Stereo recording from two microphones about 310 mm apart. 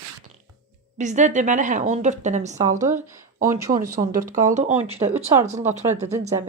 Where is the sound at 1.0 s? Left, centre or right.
Right.